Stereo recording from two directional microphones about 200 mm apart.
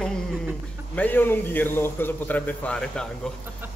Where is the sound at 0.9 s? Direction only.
10° left (ahead or behind).